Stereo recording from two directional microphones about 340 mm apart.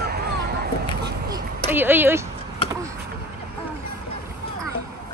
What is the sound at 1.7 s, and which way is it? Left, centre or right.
Speech, centre.